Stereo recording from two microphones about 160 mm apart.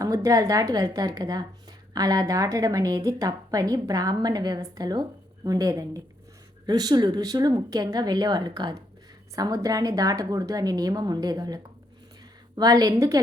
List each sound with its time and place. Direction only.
0.0 s a woman's voice: 20° right (ahead or behind)